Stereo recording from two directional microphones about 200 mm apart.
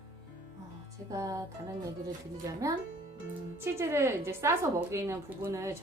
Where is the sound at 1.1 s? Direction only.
15° right (ahead or behind).